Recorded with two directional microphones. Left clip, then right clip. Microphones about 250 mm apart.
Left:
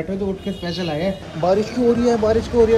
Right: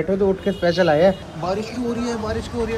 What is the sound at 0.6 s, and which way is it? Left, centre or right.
Speech, centre.